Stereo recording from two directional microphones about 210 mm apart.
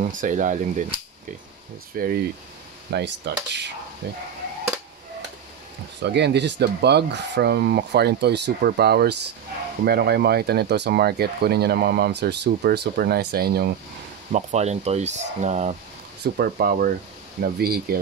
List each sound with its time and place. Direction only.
0.2 s speech: 35° right (ahead or behind)
2.0 s speech: 45° right (ahead or behind)
6.0 s speech: 55° right (ahead or behind)
14.3 s speech: 30° right (ahead or behind)
16.2 s speech: 50° right (ahead or behind)